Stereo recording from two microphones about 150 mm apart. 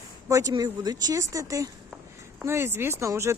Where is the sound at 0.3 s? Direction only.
20° right (ahead or behind).